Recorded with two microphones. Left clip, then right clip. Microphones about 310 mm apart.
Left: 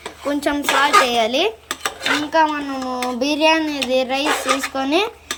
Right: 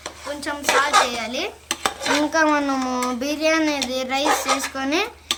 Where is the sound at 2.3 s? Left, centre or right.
Centre.